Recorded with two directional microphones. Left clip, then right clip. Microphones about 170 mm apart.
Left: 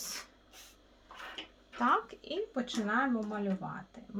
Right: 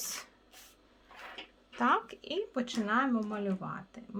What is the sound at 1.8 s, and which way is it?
Speech, 25° right (ahead or behind).